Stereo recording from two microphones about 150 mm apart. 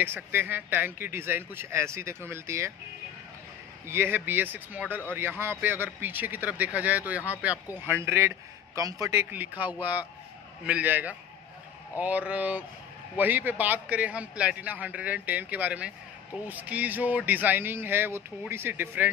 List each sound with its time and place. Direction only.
0.0 s speech: 15° right (ahead or behind)
3.8 s speech: 15° right (ahead or behind)